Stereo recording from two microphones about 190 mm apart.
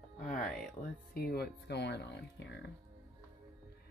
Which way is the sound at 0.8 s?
15° left (ahead or behind).